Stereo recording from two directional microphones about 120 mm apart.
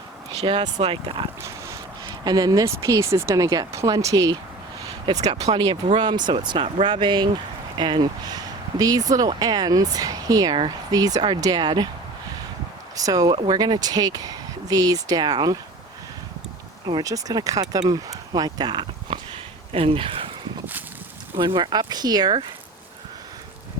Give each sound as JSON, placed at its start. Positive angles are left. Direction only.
{"t": 0.6, "sound": "speech", "side_deg": -55}
{"t": 1.4, "sound": "dog", "side_deg": -25}
{"t": 2.0, "sound": "speech", "side_deg": -35}
{"t": 5.5, "sound": "speech", "side_deg": -40}
{"t": 13.0, "sound": "speech", "side_deg": -30}
{"t": 16.8, "sound": "speech", "side_deg": -30}
{"t": 21.3, "sound": "speech", "side_deg": -40}